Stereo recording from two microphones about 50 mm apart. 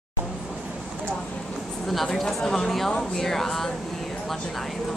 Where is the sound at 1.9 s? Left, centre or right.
Centre.